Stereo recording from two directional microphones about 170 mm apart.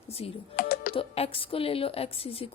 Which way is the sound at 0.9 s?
35° left (ahead or behind).